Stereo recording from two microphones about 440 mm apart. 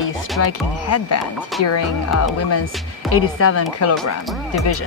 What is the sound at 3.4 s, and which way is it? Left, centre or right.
Speech, left.